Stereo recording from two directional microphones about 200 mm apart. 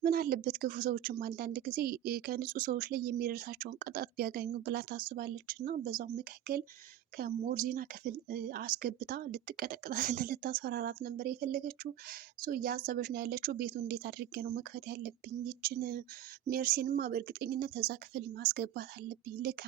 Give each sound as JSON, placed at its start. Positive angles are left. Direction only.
{"t": 0.0, "sound": "a woman's voice", "side_deg": -45}